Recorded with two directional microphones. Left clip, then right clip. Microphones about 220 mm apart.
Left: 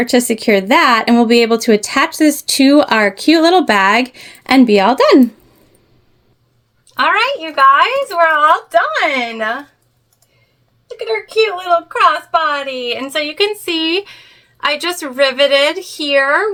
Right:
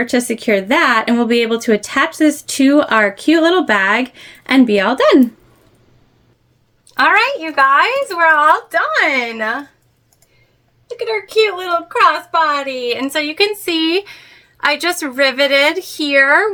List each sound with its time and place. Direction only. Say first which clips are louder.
0.0 s speech: left 3 dB; 30° left (ahead or behind)
6.8 s a woman's voice: right 1 dB; 10° right (ahead or behind)
10.8 s a woman's voice: even; 10° right (ahead or behind)